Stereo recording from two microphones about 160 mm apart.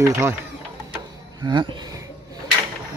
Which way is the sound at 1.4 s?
30° right (ahead or behind).